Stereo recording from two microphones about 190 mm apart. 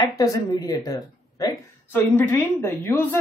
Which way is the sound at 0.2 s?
20° left (ahead or behind).